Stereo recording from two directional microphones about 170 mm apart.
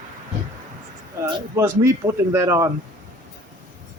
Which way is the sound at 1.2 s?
15° right (ahead or behind).